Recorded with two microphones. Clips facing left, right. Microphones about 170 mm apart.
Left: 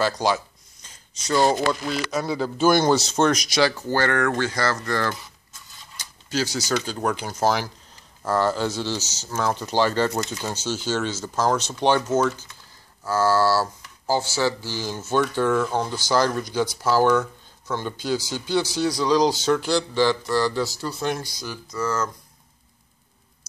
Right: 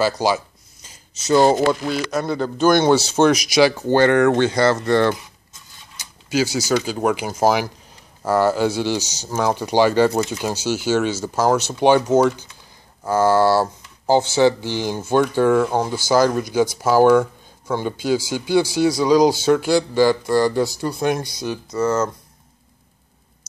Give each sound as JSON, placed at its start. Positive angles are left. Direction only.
{"t": 0.0, "sound": "a man's voice", "side_deg": -5}
{"t": 0.8, "sound": "a sound", "side_deg": -5}
{"t": 1.3, "sound": "speech", "side_deg": -25}
{"t": 1.9, "sound": "a man's voice", "side_deg": 0}
{"t": 3.7, "sound": "speech", "side_deg": -25}
{"t": 5.9, "sound": "speech", "side_deg": -10}